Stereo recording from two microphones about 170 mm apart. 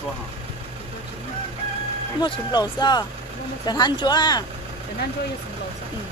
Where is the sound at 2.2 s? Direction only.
25° left (ahead or behind).